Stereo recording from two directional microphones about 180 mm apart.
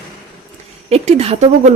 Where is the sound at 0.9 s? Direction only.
35° right (ahead or behind).